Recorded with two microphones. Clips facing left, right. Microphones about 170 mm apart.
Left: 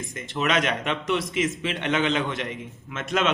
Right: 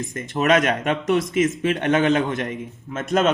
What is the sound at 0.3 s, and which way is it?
A man's voice, 45° right (ahead or behind).